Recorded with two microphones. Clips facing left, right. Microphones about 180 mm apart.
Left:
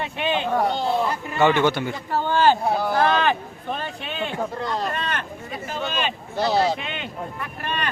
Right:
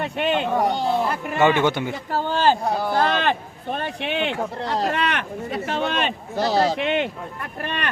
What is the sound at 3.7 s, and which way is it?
Speech, 65° right (ahead or behind).